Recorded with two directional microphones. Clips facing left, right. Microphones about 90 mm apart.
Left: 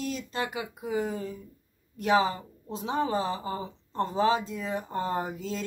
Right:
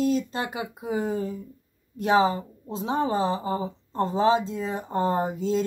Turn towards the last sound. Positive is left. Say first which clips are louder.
# right 7 dB
turn(degrees=-30)  # may be behind; listen again after turning